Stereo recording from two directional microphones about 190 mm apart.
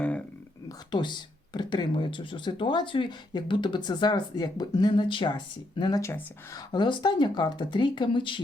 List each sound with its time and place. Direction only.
0.9 s speech: 25° left (ahead or behind)